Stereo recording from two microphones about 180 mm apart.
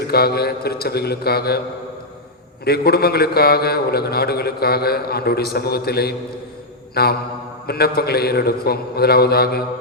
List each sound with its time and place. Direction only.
0.1 s a man's voice: 60° left (ahead or behind)
2.6 s a man's voice: 60° left (ahead or behind)